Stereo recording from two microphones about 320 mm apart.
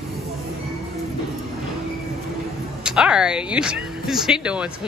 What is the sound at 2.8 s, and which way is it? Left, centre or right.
Speech, centre.